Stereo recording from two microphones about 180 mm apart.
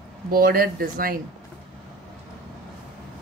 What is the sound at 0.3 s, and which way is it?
Speech, 55° right (ahead or behind).